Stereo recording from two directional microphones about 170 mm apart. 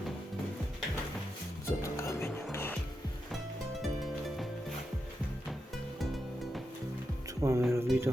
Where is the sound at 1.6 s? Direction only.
15° left (ahead or behind).